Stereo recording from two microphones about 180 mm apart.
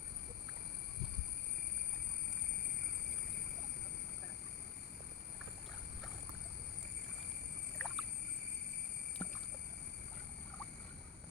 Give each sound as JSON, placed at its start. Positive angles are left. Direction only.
{"t": 7.8, "sound": "rowboat", "side_deg": 0}
{"t": 9.2, "sound": "rowboat", "side_deg": 25}